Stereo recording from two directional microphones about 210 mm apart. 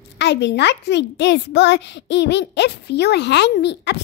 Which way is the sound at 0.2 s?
55° left (ahead or behind).